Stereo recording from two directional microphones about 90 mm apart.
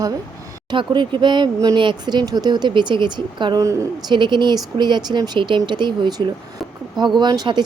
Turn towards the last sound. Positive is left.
turn(degrees=-60)  # may be behind; listen again after turning